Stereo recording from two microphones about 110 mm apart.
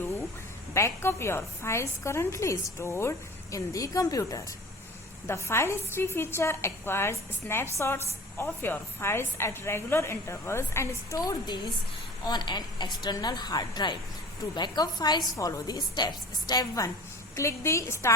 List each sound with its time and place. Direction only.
0.7 s a woman's voice: 25° left (ahead or behind)